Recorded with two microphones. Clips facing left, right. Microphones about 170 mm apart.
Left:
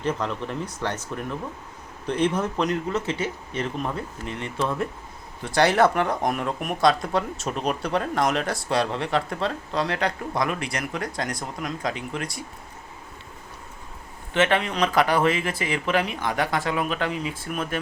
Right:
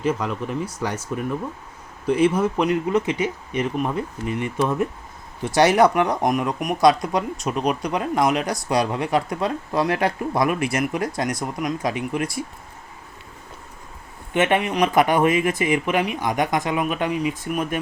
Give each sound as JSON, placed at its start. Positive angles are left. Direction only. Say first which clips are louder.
{"t": 0.0, "sound": "speech", "louder": "right 3 dB", "side_deg": -10}
{"t": 14.3, "sound": "speech", "louder": "right 3 dB", "side_deg": -10}